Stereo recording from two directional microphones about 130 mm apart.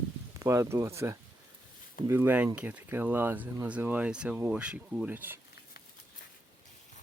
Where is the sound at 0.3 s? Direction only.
25° right (ahead or behind).